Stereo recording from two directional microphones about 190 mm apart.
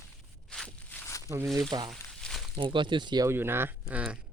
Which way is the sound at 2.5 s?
25° right (ahead or behind).